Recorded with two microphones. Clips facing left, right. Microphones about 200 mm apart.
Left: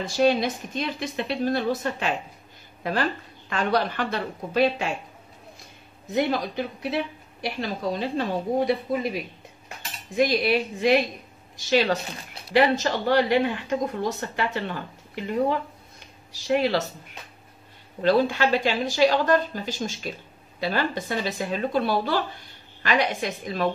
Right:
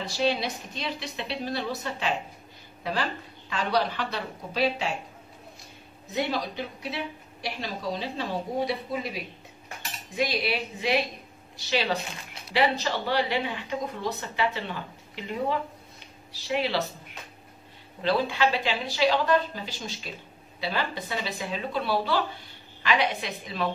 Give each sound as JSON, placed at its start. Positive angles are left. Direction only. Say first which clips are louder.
{"t": 0.0, "sound": "speech", "louder": "left 6 dB", "side_deg": 50}
{"t": 6.0, "sound": "speech", "louder": "left 5 dB", "side_deg": 50}
{"t": 16.3, "sound": "speech", "louder": "left 5 dB", "side_deg": 45}
{"t": 18.0, "sound": "speech", "louder": "left 4 dB", "side_deg": 45}